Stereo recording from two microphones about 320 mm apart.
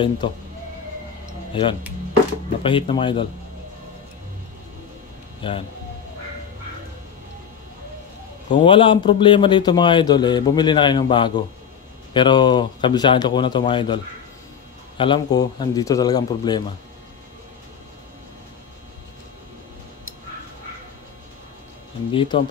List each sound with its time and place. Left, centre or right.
0.2 s a man's voice: centre
1.5 s a man's voice: centre
8.5 s a man's voice: centre
15.0 s a man's voice: centre
22.1 s a man's voice: centre